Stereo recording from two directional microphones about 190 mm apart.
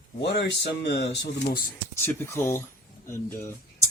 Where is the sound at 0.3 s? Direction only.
65° left (ahead or behind).